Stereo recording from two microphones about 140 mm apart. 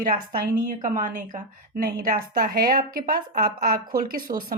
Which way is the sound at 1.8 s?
90° right.